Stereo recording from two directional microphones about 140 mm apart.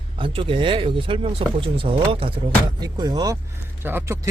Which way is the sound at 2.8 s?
30° right (ahead or behind).